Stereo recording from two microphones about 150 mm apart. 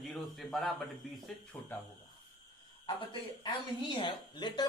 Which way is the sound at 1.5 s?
15° left (ahead or behind).